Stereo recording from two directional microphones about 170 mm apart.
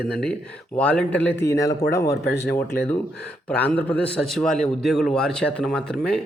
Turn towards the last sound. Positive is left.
turn(degrees=5)  # may be behind; listen again after turning